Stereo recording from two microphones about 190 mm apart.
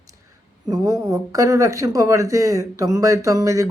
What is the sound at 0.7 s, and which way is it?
Speech, 15° right (ahead or behind).